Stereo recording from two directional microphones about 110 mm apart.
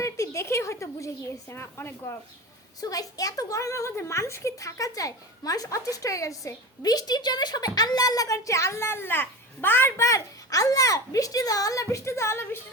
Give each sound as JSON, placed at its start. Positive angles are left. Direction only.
{"t": 0.0, "sound": "a woman's voice", "side_deg": 25}